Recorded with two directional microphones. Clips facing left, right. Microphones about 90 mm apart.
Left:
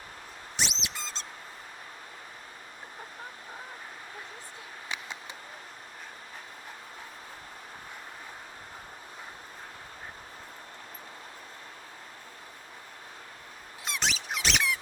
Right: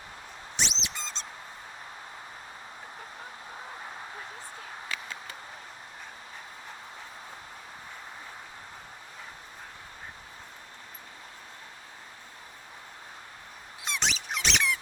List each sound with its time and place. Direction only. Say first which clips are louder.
0.5 s squeak: even; centre (ahead or behind)
4.9 s a sound: left 1 dB; 20° left (ahead or behind)
13.8 s squeak: even; centre (ahead or behind)